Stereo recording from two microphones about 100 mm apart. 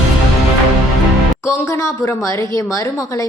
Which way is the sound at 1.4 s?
30° left (ahead or behind).